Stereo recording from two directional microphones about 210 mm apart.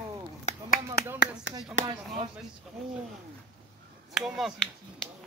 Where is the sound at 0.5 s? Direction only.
40° left (ahead or behind).